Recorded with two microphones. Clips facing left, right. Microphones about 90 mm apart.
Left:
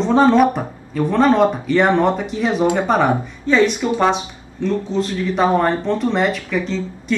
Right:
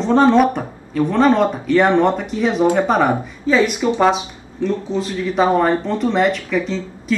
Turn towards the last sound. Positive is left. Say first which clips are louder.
# even
turn(degrees=0)  # may be behind; listen again after turning